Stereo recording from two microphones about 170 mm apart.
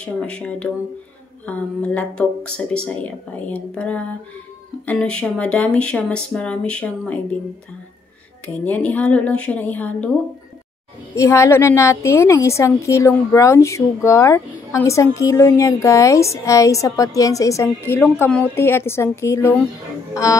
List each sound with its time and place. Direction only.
0.0 s a woman's voice: 5° left (ahead or behind)
8.6 s a woman's voice: 10° left (ahead or behind)
11.1 s a woman's voice: 15° left (ahead or behind)